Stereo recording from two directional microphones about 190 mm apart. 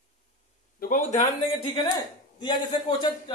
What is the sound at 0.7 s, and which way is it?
Speech, 45° left (ahead or behind).